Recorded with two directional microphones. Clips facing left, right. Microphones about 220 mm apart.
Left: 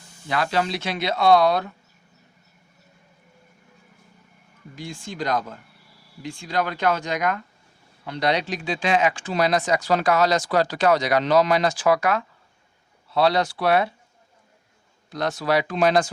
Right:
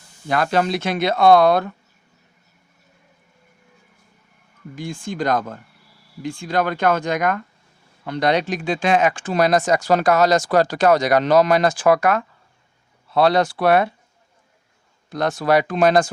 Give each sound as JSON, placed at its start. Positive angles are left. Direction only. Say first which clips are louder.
{"t": 0.3, "sound": "speech", "louder": "right 4 dB", "side_deg": -50}
{"t": 4.7, "sound": "speech", "louder": "right 6 dB", "side_deg": -50}
{"t": 15.1, "sound": "speech", "louder": "right 4 dB", "side_deg": -50}